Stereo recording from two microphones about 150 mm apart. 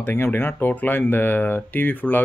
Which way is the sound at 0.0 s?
15° left (ahead or behind).